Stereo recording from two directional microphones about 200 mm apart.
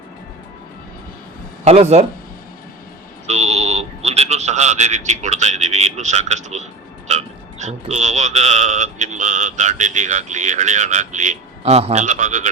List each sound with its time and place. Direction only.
1.6 s speech: 30° right (ahead or behind)
3.2 s a man's voice: 35° right (ahead or behind)